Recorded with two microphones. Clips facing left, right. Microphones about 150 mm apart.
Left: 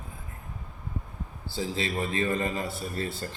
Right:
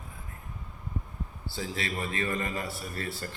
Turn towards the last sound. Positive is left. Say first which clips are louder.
# left 4 dB
turn(degrees=25)  # may be behind; listen again after turning